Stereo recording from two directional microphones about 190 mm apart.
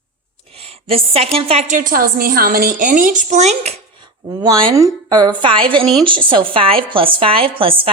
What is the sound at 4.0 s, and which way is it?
A woman's voice, 25° right (ahead or behind).